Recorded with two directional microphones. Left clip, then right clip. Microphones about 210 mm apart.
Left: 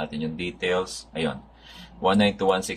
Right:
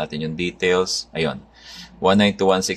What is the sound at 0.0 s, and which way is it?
Speech, 60° right (ahead or behind).